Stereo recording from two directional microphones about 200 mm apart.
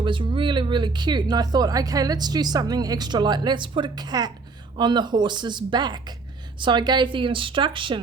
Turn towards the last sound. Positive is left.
turn(degrees=-25)  # may be behind; listen again after turning